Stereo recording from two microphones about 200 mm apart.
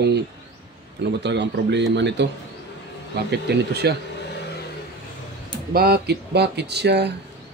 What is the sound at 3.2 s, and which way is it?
Speech, 55° right (ahead or behind).